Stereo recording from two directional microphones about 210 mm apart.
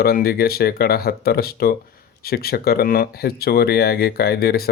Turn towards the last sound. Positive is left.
turn(degrees=45)  # may be behind; listen again after turning